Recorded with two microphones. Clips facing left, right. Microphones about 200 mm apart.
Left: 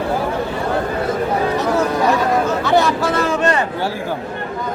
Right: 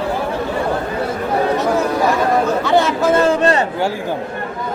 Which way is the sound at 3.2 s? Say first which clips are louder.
Right 3 dB; 30° right (ahead or behind).